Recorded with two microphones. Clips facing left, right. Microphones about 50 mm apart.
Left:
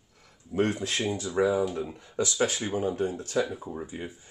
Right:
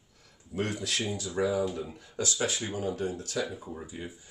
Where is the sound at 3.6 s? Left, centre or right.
Centre.